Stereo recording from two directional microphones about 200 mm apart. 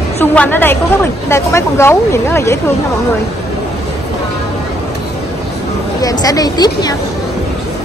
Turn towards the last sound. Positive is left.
turn(degrees=20)  # may be behind; listen again after turning